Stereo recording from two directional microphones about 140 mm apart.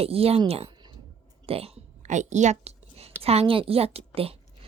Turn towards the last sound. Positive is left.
turn(degrees=-45)  # may be behind; listen again after turning